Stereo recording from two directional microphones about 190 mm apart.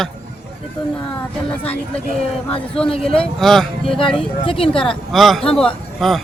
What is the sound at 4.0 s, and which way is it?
Speech, 25° left (ahead or behind).